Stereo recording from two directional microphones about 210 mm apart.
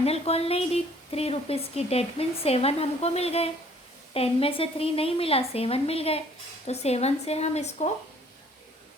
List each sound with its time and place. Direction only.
0.0 s speech: 30° left (ahead or behind)